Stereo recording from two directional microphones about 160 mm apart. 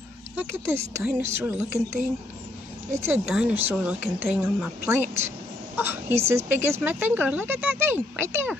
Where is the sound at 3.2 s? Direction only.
5° right (ahead or behind).